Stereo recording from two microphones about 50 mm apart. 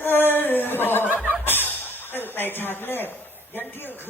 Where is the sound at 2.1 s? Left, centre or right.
Left.